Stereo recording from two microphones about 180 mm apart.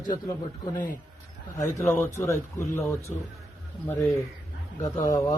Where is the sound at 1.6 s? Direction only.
15° left (ahead or behind).